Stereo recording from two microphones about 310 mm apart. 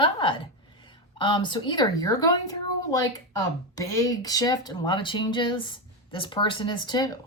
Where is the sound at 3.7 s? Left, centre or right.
Centre.